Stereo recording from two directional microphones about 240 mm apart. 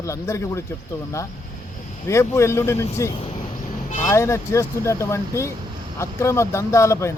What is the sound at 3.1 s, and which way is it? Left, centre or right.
Speech, left.